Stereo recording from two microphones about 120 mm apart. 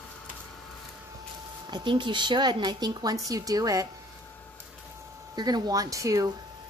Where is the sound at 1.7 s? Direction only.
40° right (ahead or behind).